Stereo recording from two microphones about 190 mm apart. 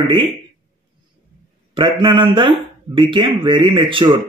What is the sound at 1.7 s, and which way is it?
Speech, 25° right (ahead or behind).